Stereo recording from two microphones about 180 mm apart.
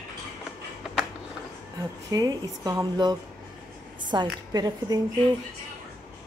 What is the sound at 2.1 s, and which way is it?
Speech, 20° right (ahead or behind).